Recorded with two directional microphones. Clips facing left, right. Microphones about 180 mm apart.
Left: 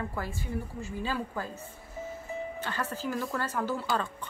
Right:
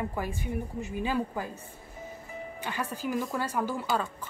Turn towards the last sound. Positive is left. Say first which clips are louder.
# right 1 dB
turn(degrees=-15)  # may be behind; listen again after turning